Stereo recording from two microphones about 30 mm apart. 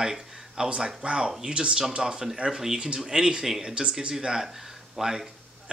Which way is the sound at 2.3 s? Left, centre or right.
Right.